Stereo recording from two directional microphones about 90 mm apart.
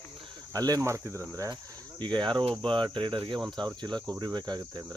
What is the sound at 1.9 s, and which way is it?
Cricket, 55° right (ahead or behind).